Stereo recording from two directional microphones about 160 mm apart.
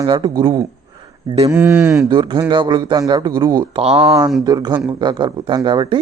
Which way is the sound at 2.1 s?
30° right (ahead or behind).